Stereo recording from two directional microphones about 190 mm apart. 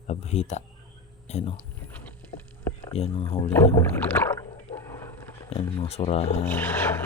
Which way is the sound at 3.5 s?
15° left (ahead or behind).